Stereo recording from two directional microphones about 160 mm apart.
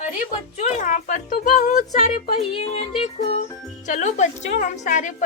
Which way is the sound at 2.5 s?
35° left (ahead or behind).